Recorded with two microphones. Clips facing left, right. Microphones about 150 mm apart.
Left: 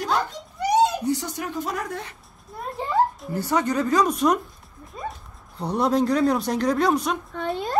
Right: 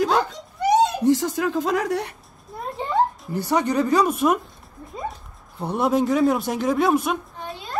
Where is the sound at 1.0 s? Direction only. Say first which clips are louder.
Right 7 dB; 90° right.